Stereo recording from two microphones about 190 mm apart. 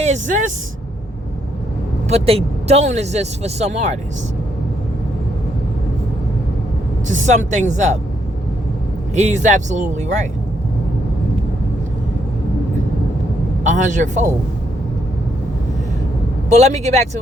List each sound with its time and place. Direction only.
0.0 s speech: 40° right (ahead or behind)
2.0 s speech: 35° right (ahead or behind)
7.1 s speech: 40° right (ahead or behind)
9.1 s speech: 40° right (ahead or behind)
13.7 s a man's voice: 40° right (ahead or behind)
16.5 s speech: 35° right (ahead or behind)